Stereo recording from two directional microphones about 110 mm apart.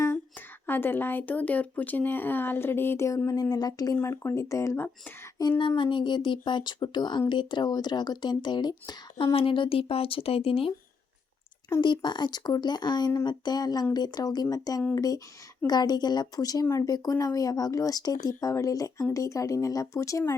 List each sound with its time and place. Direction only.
0.7 s speech: 20° left (ahead or behind); by 3.9 s 35° left (ahead or behind)
3.9 s speech: 25° left (ahead or behind)
5.4 s speech: 45° left (ahead or behind); by 10.7 s 60° left (ahead or behind)
11.8 s speech: 45° left (ahead or behind)